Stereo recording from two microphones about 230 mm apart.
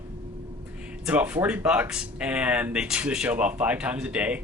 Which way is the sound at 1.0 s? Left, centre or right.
Centre.